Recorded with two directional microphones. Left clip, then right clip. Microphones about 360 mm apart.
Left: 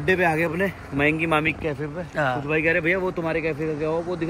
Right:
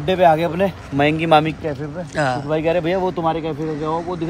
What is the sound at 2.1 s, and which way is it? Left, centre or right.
Speech, centre.